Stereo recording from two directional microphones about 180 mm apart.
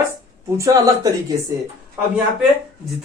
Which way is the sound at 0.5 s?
20° right (ahead or behind).